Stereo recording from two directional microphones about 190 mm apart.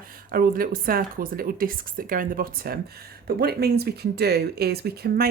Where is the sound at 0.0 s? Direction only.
50° right (ahead or behind).